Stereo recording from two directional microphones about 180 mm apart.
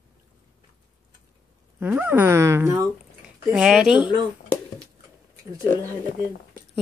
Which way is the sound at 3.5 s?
5° right (ahead or behind).